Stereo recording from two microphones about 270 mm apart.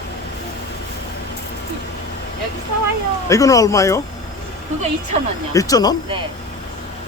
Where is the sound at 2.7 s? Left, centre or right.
Right.